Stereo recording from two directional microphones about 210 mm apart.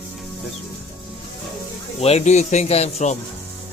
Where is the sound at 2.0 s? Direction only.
30° left (ahead or behind).